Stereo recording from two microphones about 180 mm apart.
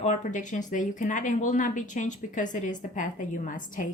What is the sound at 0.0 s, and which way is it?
Speech, 40° left (ahead or behind).